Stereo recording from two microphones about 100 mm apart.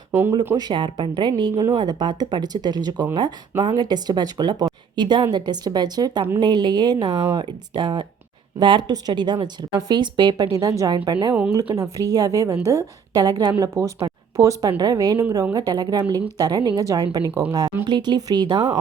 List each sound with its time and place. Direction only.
0.1 s speech: 20° right (ahead or behind)
0.5 s a woman's voice: 50° right (ahead or behind)
1.7 s a woman's voice: 40° right (ahead or behind)
17.8 s a woman's voice: 50° right (ahead or behind)